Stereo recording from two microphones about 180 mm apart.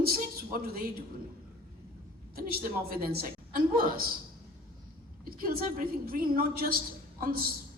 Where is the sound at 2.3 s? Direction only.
55° right (ahead or behind).